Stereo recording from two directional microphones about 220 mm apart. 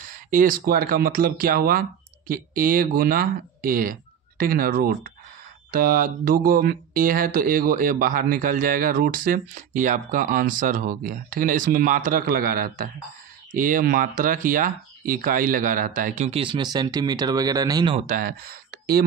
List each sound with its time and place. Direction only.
0.3 s speech: 40° right (ahead or behind); by 18.0 s 20° right (ahead or behind)
18.0 s speech: 40° right (ahead or behind)